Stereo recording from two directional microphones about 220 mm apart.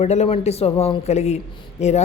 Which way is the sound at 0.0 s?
30° left (ahead or behind).